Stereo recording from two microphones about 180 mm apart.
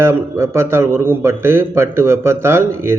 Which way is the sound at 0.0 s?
15° right (ahead or behind).